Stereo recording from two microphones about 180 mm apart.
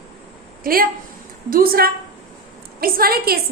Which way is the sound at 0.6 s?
55° right (ahead or behind).